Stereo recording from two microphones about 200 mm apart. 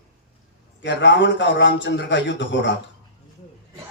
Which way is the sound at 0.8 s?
60° left (ahead or behind).